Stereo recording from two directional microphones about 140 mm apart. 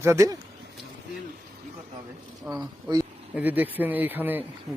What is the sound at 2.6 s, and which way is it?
Speech, 25° right (ahead or behind).